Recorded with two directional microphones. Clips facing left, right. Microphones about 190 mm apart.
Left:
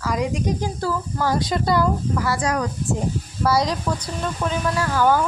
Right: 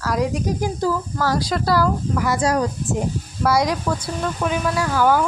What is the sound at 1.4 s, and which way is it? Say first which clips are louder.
Speech: right 1 dB; centre (ahead or behind).